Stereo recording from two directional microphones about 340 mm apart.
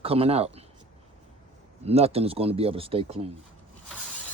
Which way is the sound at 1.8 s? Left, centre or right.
Centre.